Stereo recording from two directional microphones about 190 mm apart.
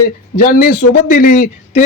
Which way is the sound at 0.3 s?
50° left (ahead or behind).